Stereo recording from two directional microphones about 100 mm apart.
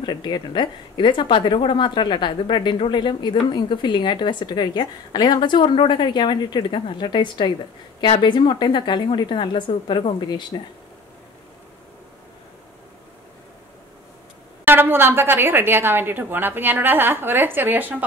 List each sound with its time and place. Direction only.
0.0 s a woman's voice: 50° left (ahead or behind)
14.6 s a woman's voice: 20° right (ahead or behind)